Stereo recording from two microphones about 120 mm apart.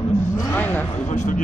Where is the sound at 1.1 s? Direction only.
85° left.